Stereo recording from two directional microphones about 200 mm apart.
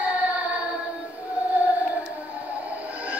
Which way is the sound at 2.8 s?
5° right (ahead or behind).